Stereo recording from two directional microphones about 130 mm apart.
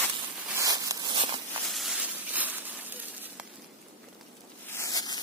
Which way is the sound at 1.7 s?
Centre (ahead or behind).